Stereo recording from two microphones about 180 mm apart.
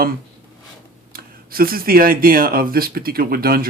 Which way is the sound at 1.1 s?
55° right (ahead or behind).